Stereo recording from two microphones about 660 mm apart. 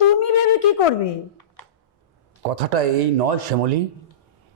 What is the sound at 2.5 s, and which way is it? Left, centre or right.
A man's voice, right.